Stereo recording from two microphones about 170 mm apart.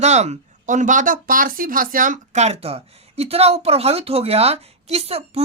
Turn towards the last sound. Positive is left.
turn(degrees=-35)  # may be behind; listen again after turning